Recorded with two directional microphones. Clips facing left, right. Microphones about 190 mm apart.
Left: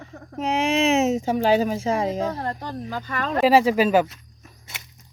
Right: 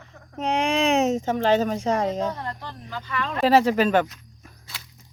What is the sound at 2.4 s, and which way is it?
Speech, 45° left (ahead or behind).